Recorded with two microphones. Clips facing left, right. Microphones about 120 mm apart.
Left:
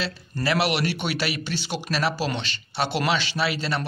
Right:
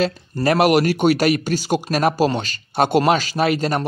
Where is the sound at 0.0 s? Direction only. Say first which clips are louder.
Right 9 dB; 45° right (ahead or behind).